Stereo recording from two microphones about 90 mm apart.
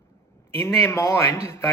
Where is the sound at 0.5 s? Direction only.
30° left (ahead or behind).